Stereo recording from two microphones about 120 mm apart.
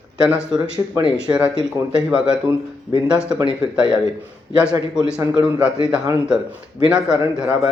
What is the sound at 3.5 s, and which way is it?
Speech, 10° right (ahead or behind).